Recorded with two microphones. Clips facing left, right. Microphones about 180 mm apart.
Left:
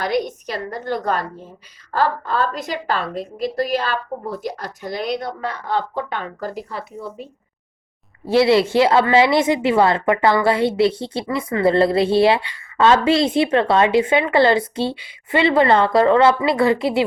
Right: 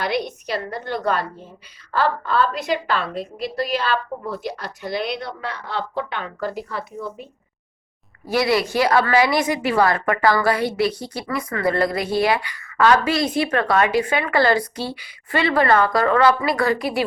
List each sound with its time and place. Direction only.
0.0 s a woman's voice: 45° left (ahead or behind)
8.3 s a woman's voice: 25° left (ahead or behind)